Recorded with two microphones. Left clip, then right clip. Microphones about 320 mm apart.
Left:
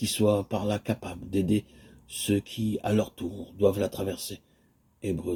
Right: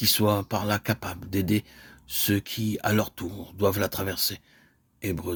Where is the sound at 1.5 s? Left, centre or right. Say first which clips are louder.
Right 1 dB; right.